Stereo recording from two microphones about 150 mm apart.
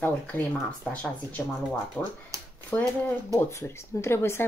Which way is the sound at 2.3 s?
20° right (ahead or behind).